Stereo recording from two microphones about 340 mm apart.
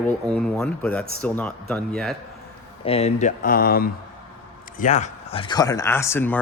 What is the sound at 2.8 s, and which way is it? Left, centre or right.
A man's voice, centre.